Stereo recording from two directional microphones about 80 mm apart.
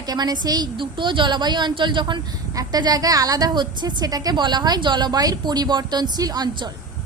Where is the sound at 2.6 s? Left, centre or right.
Right.